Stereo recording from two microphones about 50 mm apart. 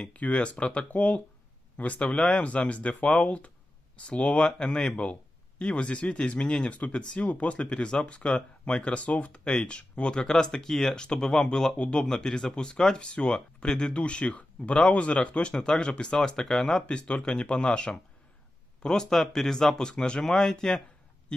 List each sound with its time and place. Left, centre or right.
0.1 s speech: left; by 16.8 s centre
16.8 s speech: left
21.3 s a sound: centre